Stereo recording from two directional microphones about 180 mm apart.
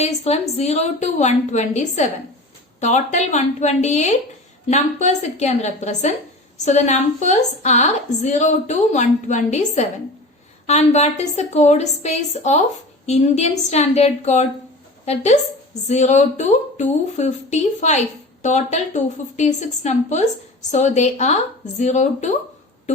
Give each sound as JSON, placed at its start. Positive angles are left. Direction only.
{"t": 0.0, "sound": "a woman's voice", "side_deg": 35}